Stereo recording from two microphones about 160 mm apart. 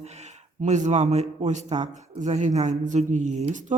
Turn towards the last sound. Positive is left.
turn(degrees=-50)  # may be behind; listen again after turning